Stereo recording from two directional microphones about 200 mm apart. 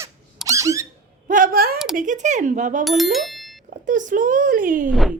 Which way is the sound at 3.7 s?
40° right (ahead or behind).